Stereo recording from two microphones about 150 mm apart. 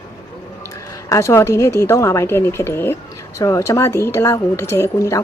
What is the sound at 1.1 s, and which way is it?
A woman's voice, 20° left (ahead or behind).